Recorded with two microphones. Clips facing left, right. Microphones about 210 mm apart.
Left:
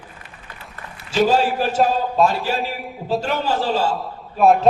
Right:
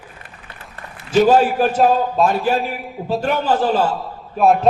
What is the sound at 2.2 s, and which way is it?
Speech, 55° right (ahead or behind).